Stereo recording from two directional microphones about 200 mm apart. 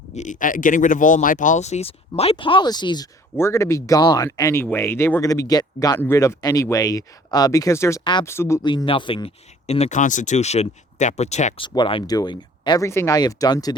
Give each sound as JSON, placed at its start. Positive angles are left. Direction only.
{"t": 0.1, "sound": "speech", "side_deg": 35}